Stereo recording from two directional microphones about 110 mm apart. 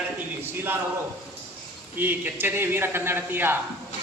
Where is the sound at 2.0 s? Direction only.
15° right (ahead or behind).